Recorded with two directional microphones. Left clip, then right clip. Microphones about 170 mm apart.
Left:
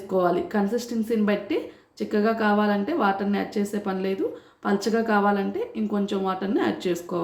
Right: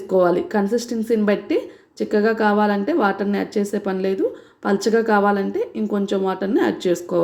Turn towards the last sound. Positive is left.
turn(degrees=-35)  # may be behind; listen again after turning